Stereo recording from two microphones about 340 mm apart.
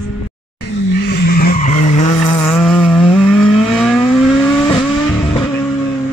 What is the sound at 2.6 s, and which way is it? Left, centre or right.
Vehicle, centre.